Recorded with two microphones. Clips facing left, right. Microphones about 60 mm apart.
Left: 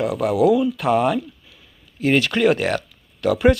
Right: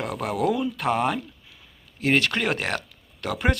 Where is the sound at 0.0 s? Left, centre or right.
Right.